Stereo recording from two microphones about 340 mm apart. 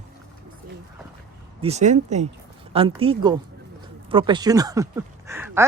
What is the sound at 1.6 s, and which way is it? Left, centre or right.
Speech, centre.